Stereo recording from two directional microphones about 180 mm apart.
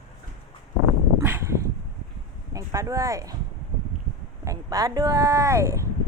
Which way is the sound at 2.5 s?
20° right (ahead or behind).